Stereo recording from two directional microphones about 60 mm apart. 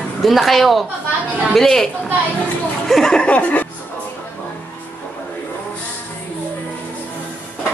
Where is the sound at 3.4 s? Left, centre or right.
Left.